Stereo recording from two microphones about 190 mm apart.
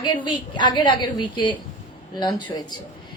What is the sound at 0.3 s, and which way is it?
A woman's voice, 25° left (ahead or behind).